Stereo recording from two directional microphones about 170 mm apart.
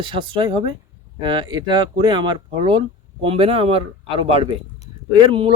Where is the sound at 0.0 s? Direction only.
30° right (ahead or behind).